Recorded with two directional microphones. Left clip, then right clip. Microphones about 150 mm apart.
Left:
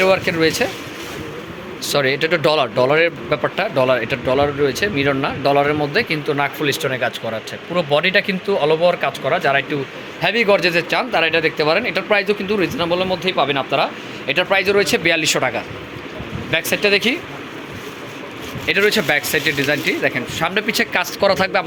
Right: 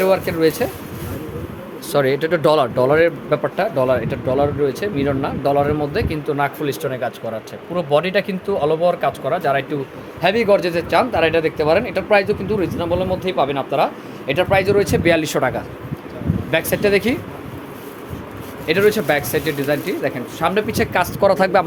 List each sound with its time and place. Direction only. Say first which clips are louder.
0.0 s speech: left 1 dB; centre (ahead or behind)
1.9 s speech: even; 20° right (ahead or behind)
3.4 s speech: left 2 dB; 5° right (ahead or behind); by 17.2 s 20° right (ahead or behind)
18.6 s speech: even; centre (ahead or behind)
21.2 s speech: right 2 dB; 30° right (ahead or behind)